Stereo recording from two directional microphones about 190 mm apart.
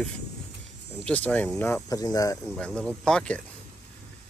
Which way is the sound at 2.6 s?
5° left (ahead or behind).